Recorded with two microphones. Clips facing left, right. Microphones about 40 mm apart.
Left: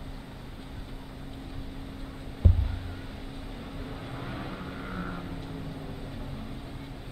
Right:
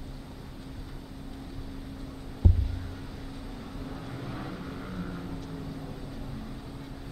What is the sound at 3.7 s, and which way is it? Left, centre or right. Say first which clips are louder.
Vehicle: even; left.